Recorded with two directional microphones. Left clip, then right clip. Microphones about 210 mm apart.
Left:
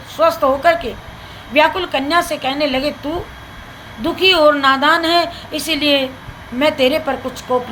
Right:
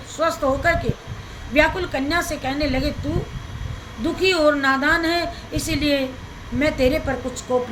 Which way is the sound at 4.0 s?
20° right (ahead or behind).